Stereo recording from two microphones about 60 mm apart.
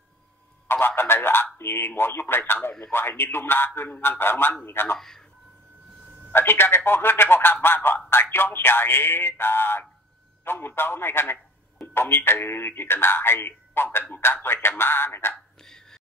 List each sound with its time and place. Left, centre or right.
0.7 s speech: left
4.9 s speech: centre
6.3 s speech: left
15.3 s a sound: centre